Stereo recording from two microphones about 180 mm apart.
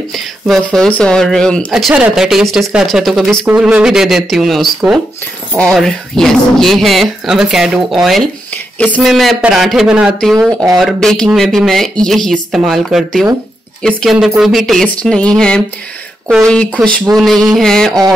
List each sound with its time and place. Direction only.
0.1 s speech: centre (ahead or behind)
17.1 s a sound: 20° right (ahead or behind)
17.5 s speech: centre (ahead or behind)